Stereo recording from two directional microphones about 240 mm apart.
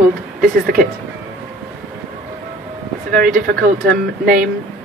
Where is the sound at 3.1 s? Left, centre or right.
Right.